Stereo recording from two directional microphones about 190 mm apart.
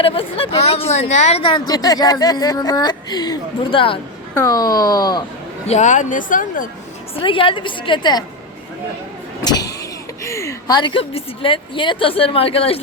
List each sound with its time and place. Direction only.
0.0 s speech: 30° left (ahead or behind)
5.6 s speech: 40° left (ahead or behind)
7.2 s speech: 25° left (ahead or behind)
9.4 s vehicle: 20° left (ahead or behind)
10.2 s speech: 15° left (ahead or behind)